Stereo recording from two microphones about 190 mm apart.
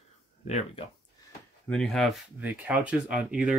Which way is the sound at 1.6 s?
5° left (ahead or behind).